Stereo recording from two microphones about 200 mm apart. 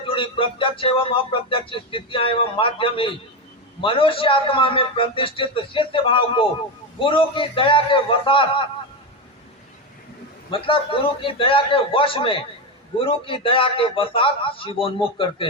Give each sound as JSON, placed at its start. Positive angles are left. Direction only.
{"t": 0.0, "sound": "speech", "side_deg": 25}
{"t": 10.5, "sound": "speech", "side_deg": 25}